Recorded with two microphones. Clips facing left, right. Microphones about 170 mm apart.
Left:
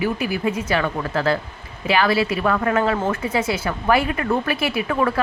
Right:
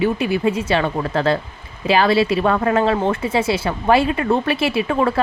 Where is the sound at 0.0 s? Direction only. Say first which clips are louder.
Right 4 dB; 25° right (ahead or behind).